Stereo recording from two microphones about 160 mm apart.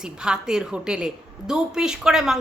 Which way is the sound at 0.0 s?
5° right (ahead or behind).